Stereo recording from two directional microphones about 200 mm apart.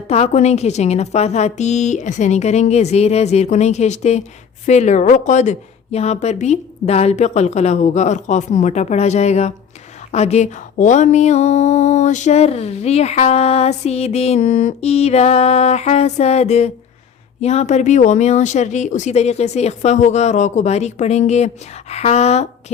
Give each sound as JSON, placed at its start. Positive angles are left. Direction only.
{"t": 0.1, "sound": "mantra", "side_deg": 35}